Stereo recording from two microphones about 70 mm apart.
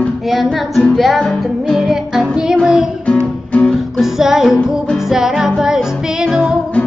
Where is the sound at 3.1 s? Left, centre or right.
Centre.